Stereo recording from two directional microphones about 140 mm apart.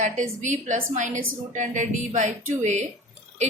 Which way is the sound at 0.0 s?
60° right (ahead or behind).